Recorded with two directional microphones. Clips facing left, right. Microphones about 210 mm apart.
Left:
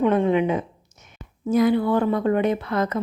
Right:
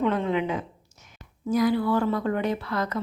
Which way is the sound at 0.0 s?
20° left (ahead or behind).